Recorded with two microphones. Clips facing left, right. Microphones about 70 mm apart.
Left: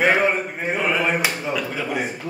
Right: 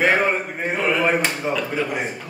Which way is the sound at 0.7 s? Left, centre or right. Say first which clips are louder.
Right 2 dB; centre.